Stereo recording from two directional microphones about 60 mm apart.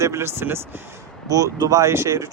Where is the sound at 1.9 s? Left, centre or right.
Right.